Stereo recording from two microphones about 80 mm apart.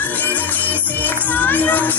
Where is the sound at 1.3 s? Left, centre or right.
Left.